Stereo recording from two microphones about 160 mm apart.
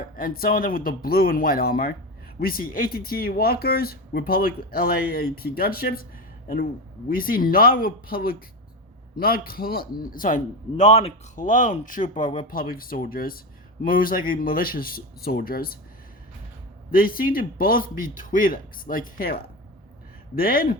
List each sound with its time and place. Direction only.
0.2 s a man's voice: 65° left (ahead or behind)
7.1 s a man's voice: 65° left (ahead or behind)
16.9 s a man's voice: 65° left (ahead or behind)